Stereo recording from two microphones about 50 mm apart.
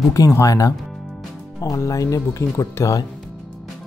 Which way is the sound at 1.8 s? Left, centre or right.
Left.